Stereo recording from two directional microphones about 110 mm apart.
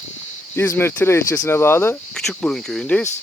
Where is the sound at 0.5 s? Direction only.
20° left (ahead or behind).